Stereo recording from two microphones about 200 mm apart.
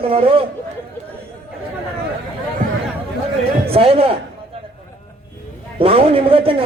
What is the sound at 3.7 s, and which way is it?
Speech, 30° right (ahead or behind).